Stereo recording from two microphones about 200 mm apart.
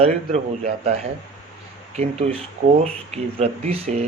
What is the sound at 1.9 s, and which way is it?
Speech, 35° right (ahead or behind).